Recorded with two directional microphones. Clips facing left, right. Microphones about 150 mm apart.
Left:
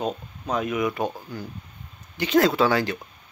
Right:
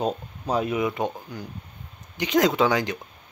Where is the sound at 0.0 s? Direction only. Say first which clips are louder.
Right 2 dB; 30° right (ahead or behind).